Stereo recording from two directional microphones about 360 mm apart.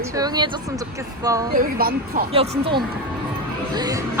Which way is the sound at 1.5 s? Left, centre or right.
Right.